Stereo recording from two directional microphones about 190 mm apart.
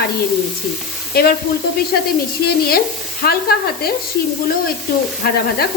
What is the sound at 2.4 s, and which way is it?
A woman's voice, 60° left (ahead or behind).